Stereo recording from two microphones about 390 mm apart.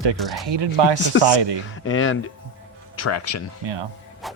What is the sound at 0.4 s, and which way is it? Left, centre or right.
Speech, right.